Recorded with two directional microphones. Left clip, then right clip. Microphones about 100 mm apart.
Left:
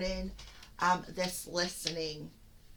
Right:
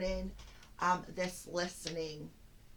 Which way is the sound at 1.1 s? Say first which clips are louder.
Left 3 dB; 35° left (ahead or behind).